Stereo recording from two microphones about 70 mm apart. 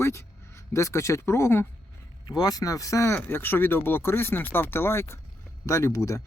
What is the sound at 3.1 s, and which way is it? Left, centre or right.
Speech, left.